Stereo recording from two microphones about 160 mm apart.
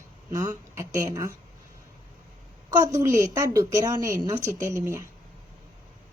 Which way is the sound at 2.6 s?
25° right (ahead or behind).